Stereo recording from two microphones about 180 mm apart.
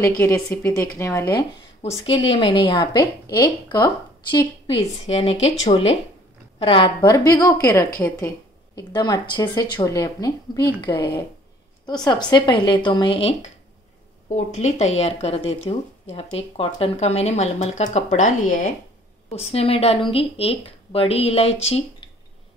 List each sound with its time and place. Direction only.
0.0 s a woman's voice: 15° left (ahead or behind)
1.3 s speech: 30° left (ahead or behind)
19.3 s speech: 35° left (ahead or behind)